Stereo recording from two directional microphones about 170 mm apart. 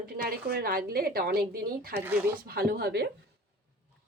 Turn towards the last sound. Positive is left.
turn(degrees=-65)  # may be behind; listen again after turning